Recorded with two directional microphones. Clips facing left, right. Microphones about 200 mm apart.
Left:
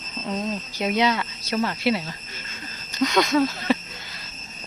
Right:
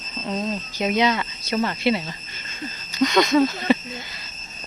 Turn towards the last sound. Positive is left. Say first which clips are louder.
# right 3 dB
turn(degrees=0)  # may be behind; listen again after turning